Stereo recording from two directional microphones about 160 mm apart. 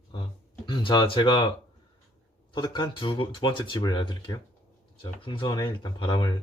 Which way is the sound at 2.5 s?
25° left (ahead or behind).